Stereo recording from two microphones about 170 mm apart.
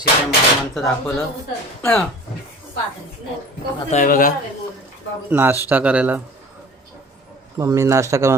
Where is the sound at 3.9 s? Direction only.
50° left (ahead or behind).